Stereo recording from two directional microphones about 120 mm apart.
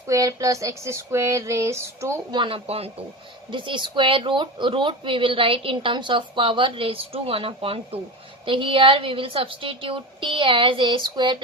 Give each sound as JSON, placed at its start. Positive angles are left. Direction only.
{"t": 0.1, "sound": "a sound", "side_deg": -25}
{"t": 2.3, "sound": "a woman's voice", "side_deg": -40}
{"t": 2.6, "sound": "speech", "side_deg": -55}
{"t": 3.5, "sound": "a woman's voice", "side_deg": -45}